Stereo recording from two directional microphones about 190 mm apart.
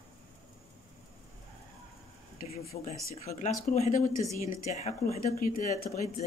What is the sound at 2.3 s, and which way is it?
Speech, 40° left (ahead or behind).